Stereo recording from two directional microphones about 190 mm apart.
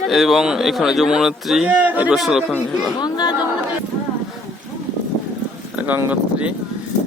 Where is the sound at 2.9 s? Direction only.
25° left (ahead or behind).